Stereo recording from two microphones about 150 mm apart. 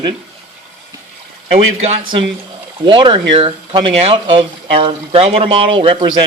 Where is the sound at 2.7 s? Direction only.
35° right (ahead or behind).